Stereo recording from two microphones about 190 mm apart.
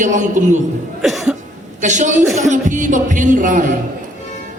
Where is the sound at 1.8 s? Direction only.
40° right (ahead or behind).